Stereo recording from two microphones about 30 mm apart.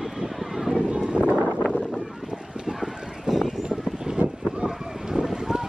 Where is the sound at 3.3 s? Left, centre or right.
Centre.